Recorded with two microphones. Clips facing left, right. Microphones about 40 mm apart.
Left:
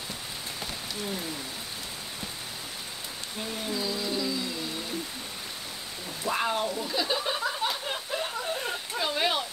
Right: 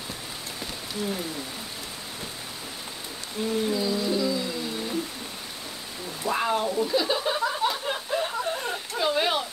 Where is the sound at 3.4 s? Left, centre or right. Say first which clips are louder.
Right 8 dB; centre.